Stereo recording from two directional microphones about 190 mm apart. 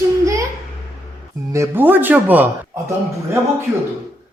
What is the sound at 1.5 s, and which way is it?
A man's voice, 15° right (ahead or behind).